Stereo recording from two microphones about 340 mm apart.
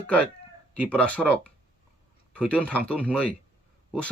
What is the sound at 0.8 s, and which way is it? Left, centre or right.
Speech, centre.